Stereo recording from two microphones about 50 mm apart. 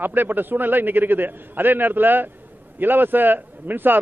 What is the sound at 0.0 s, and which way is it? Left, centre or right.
A man's voice, right.